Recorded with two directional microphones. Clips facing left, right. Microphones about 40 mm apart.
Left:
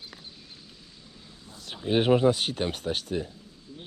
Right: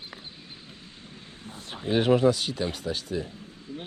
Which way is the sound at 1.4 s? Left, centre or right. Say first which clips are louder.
Even; right.